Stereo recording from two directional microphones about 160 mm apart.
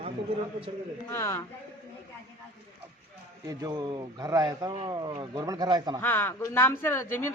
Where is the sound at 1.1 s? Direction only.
15° left (ahead or behind).